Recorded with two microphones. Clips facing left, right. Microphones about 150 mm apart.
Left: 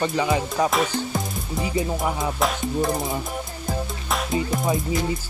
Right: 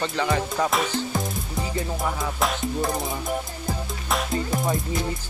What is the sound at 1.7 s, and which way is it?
Music, 20° left (ahead or behind).